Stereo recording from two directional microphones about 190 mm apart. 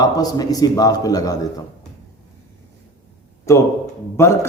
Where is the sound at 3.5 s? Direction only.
15° left (ahead or behind).